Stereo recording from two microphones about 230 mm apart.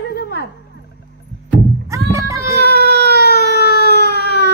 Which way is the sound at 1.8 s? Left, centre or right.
Centre.